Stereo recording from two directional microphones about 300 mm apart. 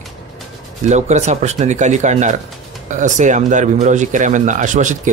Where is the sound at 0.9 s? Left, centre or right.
Right.